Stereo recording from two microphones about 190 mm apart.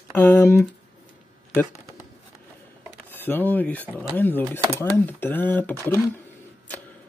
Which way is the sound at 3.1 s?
10° left (ahead or behind).